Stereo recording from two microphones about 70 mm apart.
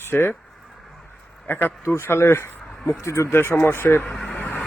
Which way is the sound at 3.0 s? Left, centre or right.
Left.